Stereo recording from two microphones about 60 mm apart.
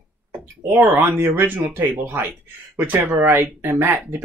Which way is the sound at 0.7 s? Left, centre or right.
Right.